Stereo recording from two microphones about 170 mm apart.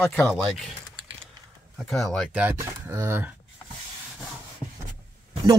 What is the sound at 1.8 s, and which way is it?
Speech, 5° left (ahead or behind).